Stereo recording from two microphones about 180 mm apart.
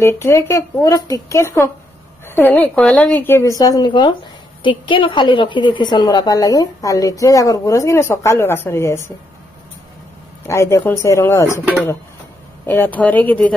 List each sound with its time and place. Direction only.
0.0 s a woman's voice: 15° left (ahead or behind)
10.4 s a woman's voice: 15° left (ahead or behind)
12.6 s a woman's voice: 10° left (ahead or behind)